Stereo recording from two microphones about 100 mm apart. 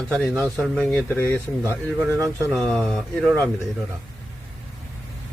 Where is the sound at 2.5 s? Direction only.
Centre (ahead or behind).